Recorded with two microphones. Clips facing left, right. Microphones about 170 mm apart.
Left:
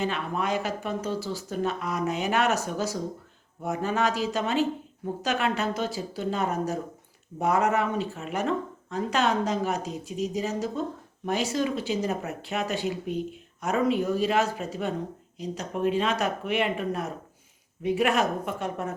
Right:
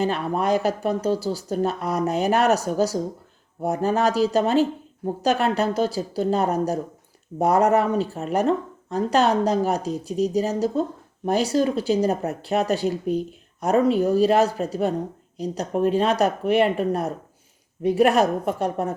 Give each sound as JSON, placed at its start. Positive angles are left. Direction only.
{"t": 0.0, "sound": "speech", "side_deg": -35}